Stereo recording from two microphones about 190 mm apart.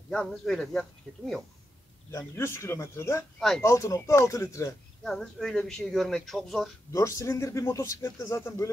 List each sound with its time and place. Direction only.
0.1 s speech: centre (ahead or behind)
2.0 s speech: 15° left (ahead or behind)
3.3 s speech: centre (ahead or behind)
3.6 s speech: 15° left (ahead or behind)
5.0 s speech: centre (ahead or behind)
6.9 s speech: 15° left (ahead or behind)